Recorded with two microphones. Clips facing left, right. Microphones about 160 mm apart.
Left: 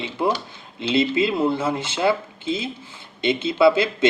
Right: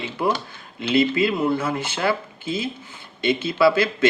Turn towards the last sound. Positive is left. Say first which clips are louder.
# left 1 dB
turn(degrees=20)  # may be behind; listen again after turning